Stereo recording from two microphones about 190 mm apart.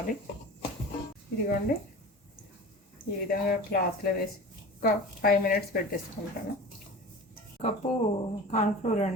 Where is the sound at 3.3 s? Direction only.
50° left (ahead or behind).